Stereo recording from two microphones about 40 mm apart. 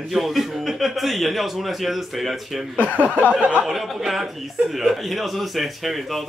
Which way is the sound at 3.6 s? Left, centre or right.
Centre.